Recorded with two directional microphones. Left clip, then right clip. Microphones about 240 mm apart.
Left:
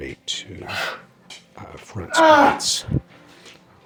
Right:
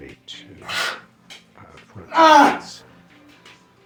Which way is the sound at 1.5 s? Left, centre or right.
Left.